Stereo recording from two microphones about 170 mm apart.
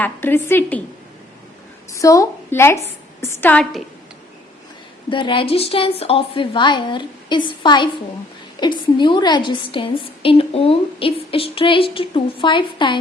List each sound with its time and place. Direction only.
0.0 s a woman's voice: 10° left (ahead or behind)
2.0 s a woman's voice: 20° left (ahead or behind); by 3.8 s centre (ahead or behind)
5.0 s a woman's voice: 30° left (ahead or behind)